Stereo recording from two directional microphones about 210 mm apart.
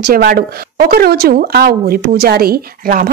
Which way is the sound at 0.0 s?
45° right (ahead or behind).